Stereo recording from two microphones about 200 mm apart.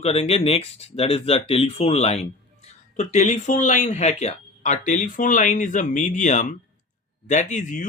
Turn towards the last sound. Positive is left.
turn(degrees=40)  # may be behind; listen again after turning